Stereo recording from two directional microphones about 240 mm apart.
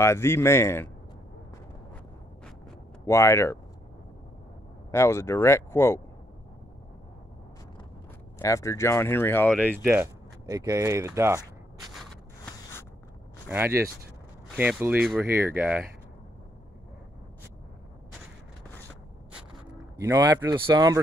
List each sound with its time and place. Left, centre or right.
0.0 s speech: centre
3.1 s speech: centre
4.9 s speech: centre
8.4 s speech: centre
9.8 s speech: centre
13.5 s speech: centre
20.0 s speech: centre